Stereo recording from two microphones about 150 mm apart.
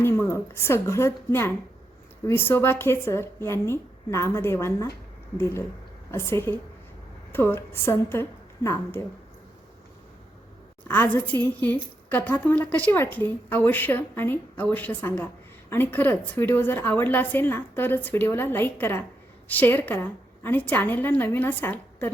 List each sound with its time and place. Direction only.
0.0 s a woman's voice: 15° left (ahead or behind)
6.1 s a woman's voice: 15° left (ahead or behind)
10.8 s a woman's voice: 10° left (ahead or behind)